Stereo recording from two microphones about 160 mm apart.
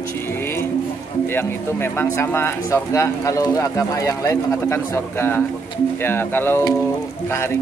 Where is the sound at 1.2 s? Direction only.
15° left (ahead or behind).